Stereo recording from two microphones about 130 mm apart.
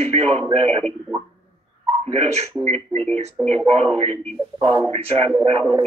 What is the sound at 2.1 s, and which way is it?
A man's voice, 55° right (ahead or behind).